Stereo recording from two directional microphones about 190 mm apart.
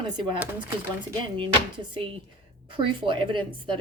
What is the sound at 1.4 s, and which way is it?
Speech, 25° right (ahead or behind).